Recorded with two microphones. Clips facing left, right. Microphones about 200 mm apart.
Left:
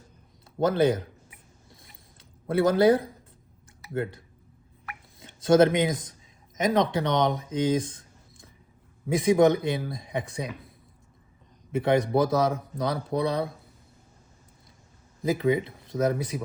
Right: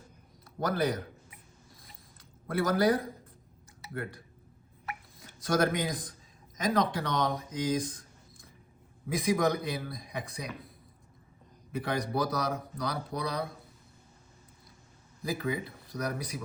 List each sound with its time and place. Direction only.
0.4 s a man's voice: 25° left (ahead or behind)
2.5 s speech: 25° left (ahead or behind)
5.2 s speech: 25° left (ahead or behind)
11.7 s speech: 25° left (ahead or behind)
15.2 s speech: 20° left (ahead or behind)